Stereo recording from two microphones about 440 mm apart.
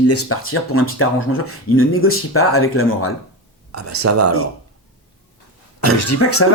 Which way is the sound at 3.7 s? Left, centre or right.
Right.